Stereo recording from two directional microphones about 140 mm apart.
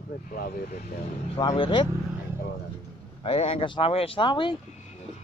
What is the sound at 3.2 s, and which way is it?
Speech, 45° left (ahead or behind).